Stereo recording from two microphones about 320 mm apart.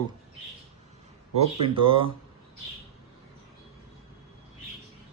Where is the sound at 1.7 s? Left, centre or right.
Centre.